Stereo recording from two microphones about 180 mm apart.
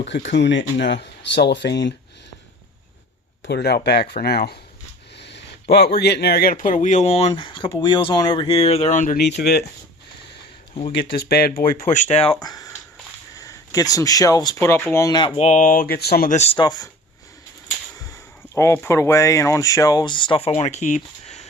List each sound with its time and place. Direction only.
0.3 s speech: 80° left
3.4 s speech: 65° left (ahead or behind); by 9.1 s 45° left (ahead or behind)
9.1 s speech: 65° left (ahead or behind)
11.1 s speech: 60° left (ahead or behind); by 12.4 s 35° left (ahead or behind)
12.4 s speech: 20° left (ahead or behind)
15.4 s speech: 40° left (ahead or behind); by 16.3 s 60° left (ahead or behind)
16.3 s speech: 35° left (ahead or behind)
16.6 s speech: 20° left (ahead or behind)
18.0 s speech: 15° left (ahead or behind); by 21.4 s 40° left (ahead or behind)